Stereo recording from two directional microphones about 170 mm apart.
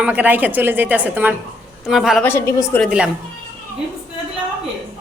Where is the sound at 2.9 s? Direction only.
5° right (ahead or behind).